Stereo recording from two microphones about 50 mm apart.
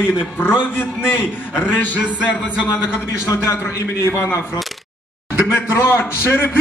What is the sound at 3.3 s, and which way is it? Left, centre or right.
Speech, left.